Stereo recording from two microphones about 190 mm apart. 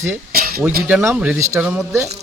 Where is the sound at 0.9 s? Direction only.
10° right (ahead or behind).